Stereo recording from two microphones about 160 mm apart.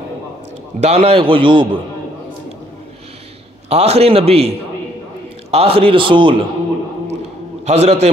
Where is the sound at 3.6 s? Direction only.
40° right (ahead or behind).